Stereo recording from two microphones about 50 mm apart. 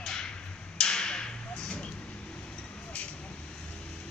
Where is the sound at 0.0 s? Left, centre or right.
Centre.